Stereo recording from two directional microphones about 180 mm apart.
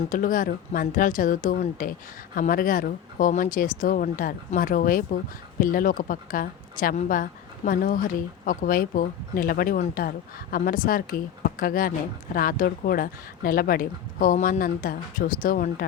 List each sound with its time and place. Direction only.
0.1 s a woman's voice: 50° left (ahead or behind)